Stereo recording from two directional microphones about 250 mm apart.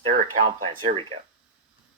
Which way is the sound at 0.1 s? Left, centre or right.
Right.